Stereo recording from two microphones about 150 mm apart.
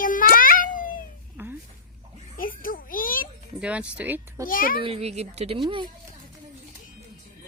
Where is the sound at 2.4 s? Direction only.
70° left (ahead or behind).